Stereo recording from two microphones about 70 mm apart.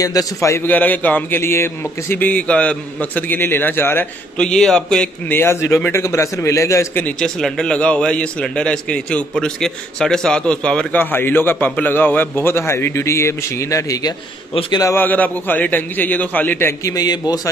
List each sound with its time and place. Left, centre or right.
0.0 s a man's voice: left
0.7 s a man's voice: left
1.4 s a man's voice: left
2.1 s a man's voice: left
4.4 s a man's voice: centre
5.3 s a man's voice: left
7.2 s a man's voice: centre
10.9 s a man's voice: left
15.0 s a man's voice: left
16.8 s a man's voice: left